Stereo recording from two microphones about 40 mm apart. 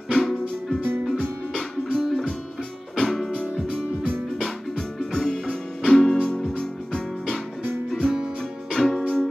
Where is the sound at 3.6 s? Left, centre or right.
Centre.